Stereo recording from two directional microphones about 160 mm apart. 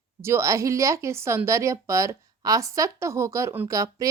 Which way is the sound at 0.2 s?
15° right (ahead or behind).